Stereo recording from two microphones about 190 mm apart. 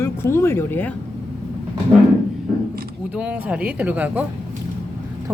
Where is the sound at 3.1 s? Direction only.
5° right (ahead or behind).